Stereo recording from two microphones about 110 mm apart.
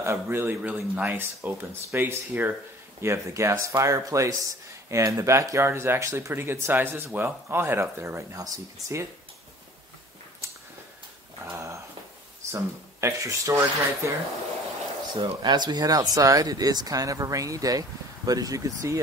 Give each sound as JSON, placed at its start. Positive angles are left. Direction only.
{"t": 0.0, "sound": "speech", "side_deg": -20}
{"t": 11.5, "sound": "dog", "side_deg": -25}
{"t": 12.4, "sound": "speech", "side_deg": -25}
{"t": 15.4, "sound": "speech", "side_deg": -40}